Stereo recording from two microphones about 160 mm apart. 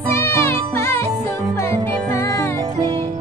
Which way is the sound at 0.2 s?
15° left (ahead or behind).